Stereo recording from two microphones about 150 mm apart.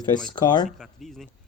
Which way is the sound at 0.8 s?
Centre (ahead or behind).